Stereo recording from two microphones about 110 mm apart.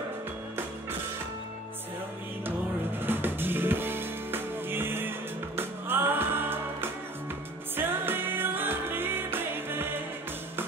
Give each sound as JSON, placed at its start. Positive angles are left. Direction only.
{"t": 3.0, "sound": "music", "side_deg": -20}